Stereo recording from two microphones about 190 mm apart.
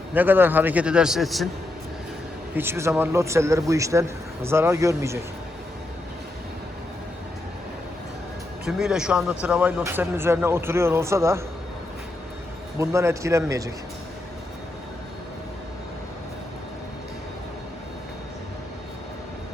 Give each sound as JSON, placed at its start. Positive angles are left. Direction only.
{"t": 0.1, "sound": "speech", "side_deg": -10}
{"t": 2.6, "sound": "speech", "side_deg": -15}
{"t": 8.6, "sound": "speech", "side_deg": -5}
{"t": 12.8, "sound": "speech", "side_deg": -15}